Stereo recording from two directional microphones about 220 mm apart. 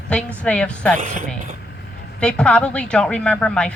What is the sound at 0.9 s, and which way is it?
Speech, 35° right (ahead or behind).